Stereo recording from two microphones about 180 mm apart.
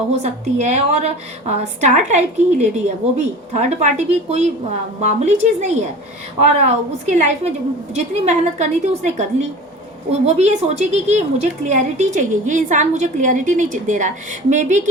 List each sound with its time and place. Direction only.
0.1 s a woman's voice: 40° right (ahead or behind)